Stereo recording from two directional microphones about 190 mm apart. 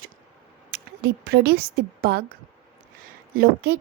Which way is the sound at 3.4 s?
55° right (ahead or behind).